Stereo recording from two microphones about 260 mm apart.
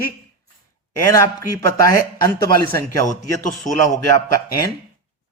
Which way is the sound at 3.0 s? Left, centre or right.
Left.